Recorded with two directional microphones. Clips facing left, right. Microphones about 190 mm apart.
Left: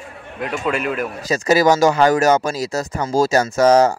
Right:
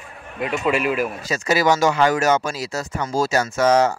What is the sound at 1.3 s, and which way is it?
Speech, 40° left (ahead or behind).